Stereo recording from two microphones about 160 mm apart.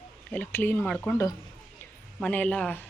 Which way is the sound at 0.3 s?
10° left (ahead or behind).